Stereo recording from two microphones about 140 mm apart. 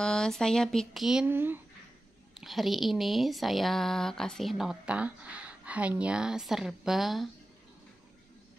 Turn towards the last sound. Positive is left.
turn(degrees=0)  # may be behind; listen again after turning